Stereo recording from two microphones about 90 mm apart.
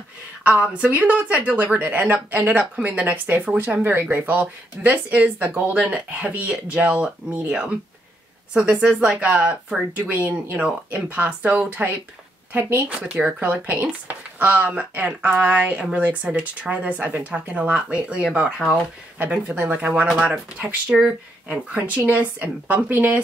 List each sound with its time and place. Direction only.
0.4 s a woman's voice: 15° right (ahead or behind)
12.8 s a woman's voice: 10° right (ahead or behind)